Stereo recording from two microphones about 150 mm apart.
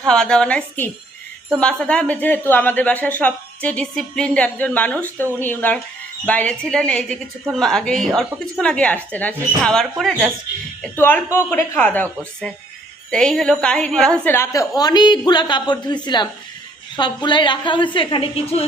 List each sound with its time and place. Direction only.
0.1 s a woman's voice: 5° left (ahead or behind)
10.9 s a woman's voice: 15° left (ahead or behind); by 18.6 s 40° left (ahead or behind)